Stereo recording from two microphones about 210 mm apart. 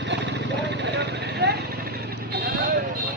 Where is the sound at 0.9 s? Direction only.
50° right (ahead or behind).